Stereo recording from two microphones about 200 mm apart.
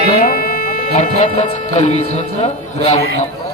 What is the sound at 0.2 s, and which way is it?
Speech, 45° left (ahead or behind).